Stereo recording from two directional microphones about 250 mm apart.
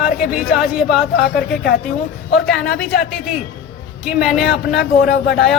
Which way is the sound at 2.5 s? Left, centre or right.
Centre.